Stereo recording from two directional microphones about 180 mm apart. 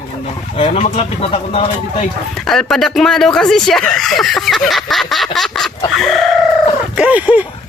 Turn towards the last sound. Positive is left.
turn(degrees=-10)  # may be behind; listen again after turning